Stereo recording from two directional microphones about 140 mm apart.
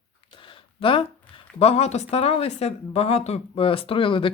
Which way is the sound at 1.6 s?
45° left (ahead or behind).